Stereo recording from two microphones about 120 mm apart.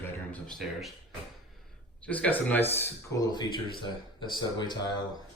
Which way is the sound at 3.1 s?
35° left (ahead or behind).